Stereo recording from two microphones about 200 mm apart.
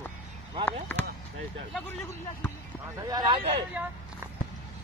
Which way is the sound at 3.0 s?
20° right (ahead or behind).